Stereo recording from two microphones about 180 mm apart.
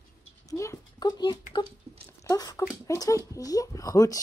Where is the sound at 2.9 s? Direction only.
20° left (ahead or behind).